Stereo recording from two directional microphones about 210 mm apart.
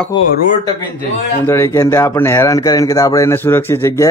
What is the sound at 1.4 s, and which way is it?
Speech, 10° left (ahead or behind).